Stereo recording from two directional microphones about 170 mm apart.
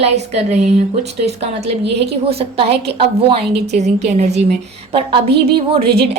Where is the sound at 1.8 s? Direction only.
80° right.